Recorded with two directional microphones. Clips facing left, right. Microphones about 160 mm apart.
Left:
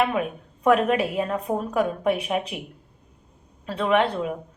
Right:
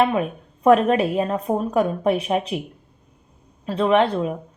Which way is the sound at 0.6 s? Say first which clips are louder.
Right 4 dB; 35° right (ahead or behind).